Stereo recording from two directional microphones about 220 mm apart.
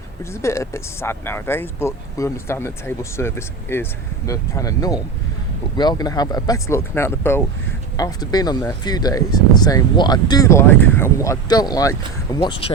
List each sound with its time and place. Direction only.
0.4 s speech: 15° left (ahead or behind)